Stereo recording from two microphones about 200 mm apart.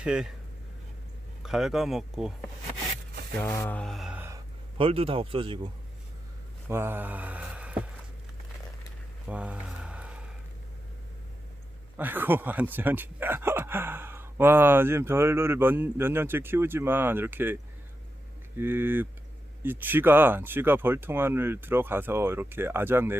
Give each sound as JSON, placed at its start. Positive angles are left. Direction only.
{"t": 0.0, "sound": "speech", "side_deg": -5}
{"t": 1.4, "sound": "speech", "side_deg": 0}
{"t": 3.4, "sound": "mantra", "side_deg": 10}
{"t": 4.8, "sound": "speech", "side_deg": -30}
{"t": 6.7, "sound": "speech", "side_deg": -10}
{"t": 9.2, "sound": "a sound", "side_deg": -5}
{"t": 11.9, "sound": "speech", "side_deg": -10}